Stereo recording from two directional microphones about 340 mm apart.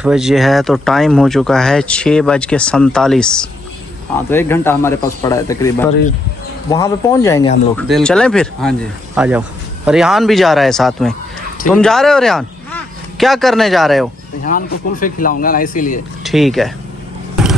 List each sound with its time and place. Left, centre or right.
0.0 s speech: centre
14.5 s speech: left
16.3 s speech: centre